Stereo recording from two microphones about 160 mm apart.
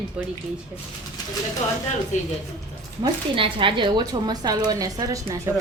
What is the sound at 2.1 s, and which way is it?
Speech, 50° left (ahead or behind).